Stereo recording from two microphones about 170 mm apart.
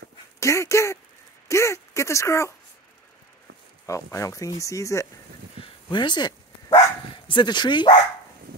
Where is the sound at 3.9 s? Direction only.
15° left (ahead or behind).